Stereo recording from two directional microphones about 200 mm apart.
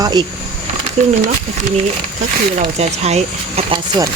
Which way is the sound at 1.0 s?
35° right (ahead or behind).